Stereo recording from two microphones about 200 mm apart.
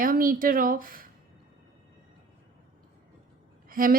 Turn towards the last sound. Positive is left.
turn(degrees=-45)  # may be behind; listen again after turning